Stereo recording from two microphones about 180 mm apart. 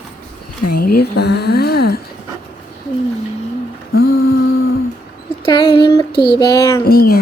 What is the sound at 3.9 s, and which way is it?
Humming, 60° left (ahead or behind).